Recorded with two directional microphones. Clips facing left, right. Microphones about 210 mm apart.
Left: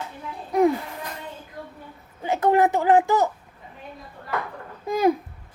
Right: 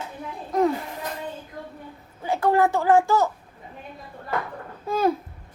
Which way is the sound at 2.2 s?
20° left (ahead or behind).